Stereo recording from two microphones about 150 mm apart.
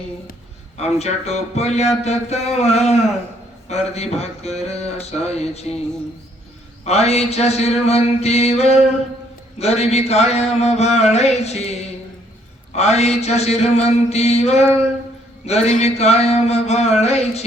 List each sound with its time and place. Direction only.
0.8 s speech: 45° left (ahead or behind)
6.8 s speech: 45° left (ahead or behind)